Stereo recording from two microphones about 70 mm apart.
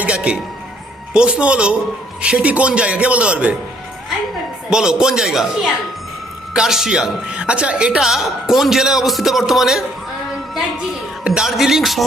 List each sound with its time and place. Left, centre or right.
0.0 s music: centre
1.1 s a man's voice: centre
4.7 s a man's voice: centre
6.5 s a woman's voice: centre
11.2 s a man's voice: centre
11.4 s a woman's voice: centre